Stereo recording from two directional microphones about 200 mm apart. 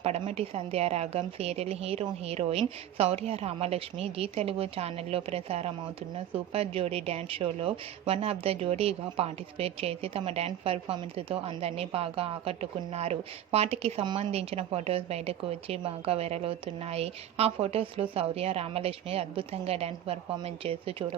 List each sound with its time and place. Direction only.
0.0 s a woman's voice: 30° right (ahead or behind)